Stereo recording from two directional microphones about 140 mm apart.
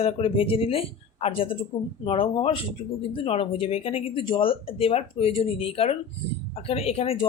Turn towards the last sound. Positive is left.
turn(degrees=45)  # may be behind; listen again after turning